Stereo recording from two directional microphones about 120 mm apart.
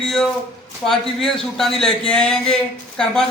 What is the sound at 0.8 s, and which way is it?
Speech, 5° left (ahead or behind).